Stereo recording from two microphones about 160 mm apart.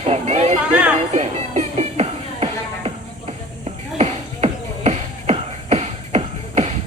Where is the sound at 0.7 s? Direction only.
5° right (ahead or behind).